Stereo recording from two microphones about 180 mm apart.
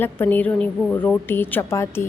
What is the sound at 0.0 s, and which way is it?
A woman's voice, 10° left (ahead or behind).